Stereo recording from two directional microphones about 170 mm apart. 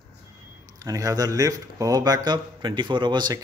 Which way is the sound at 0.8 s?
20° right (ahead or behind).